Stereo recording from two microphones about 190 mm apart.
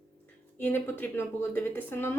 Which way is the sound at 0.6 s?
10° left (ahead or behind).